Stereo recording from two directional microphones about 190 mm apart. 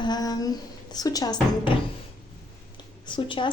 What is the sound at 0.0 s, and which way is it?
A woman's voice, 20° left (ahead or behind).